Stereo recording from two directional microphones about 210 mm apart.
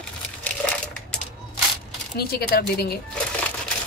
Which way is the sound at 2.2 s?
45° left (ahead or behind).